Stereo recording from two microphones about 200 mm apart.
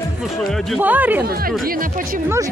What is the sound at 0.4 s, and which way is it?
Speech, centre (ahead or behind).